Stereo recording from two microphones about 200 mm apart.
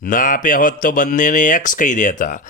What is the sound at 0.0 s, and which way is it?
Speech, 40° left (ahead or behind).